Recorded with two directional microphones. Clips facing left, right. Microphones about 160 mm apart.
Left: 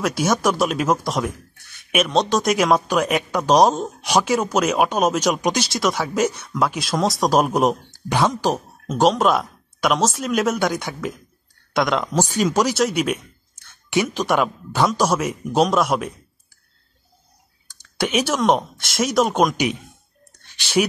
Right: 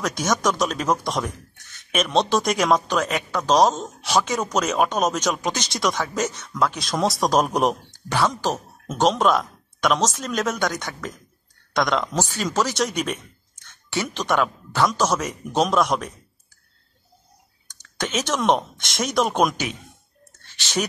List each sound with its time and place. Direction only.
0.0 s speech: 10° left (ahead or behind)
1.8 s a sound: 10° left (ahead or behind)
2.0 s speech: centre (ahead or behind); by 5.7 s 15° left (ahead or behind)
5.7 s speech: 5° left (ahead or behind)
12.2 s speech: 15° left (ahead or behind)
17.6 s a sound: 10° left (ahead or behind)
18.6 s speech: 5° left (ahead or behind)
19.5 s speech: 15° left (ahead or behind)
20.3 s a sound: 10° left (ahead or behind)